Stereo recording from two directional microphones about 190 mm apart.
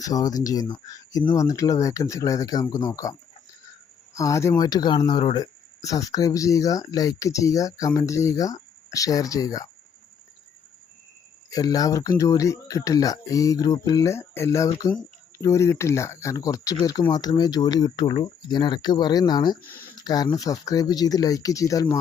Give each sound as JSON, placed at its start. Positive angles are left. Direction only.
{"t": 0.0, "sound": "speech", "side_deg": 20}
{"t": 11.5, "sound": "speech", "side_deg": 20}